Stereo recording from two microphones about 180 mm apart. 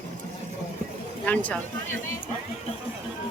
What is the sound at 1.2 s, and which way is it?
Speech, 10° left (ahead or behind).